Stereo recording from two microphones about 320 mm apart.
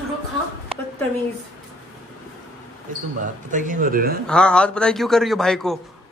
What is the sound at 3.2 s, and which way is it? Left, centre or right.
Speech, right.